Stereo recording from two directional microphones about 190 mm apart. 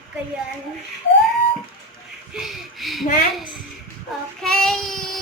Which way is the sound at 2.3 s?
Centre (ahead or behind).